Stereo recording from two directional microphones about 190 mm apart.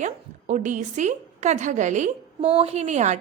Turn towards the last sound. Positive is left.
turn(degrees=-40)  # may be behind; listen again after turning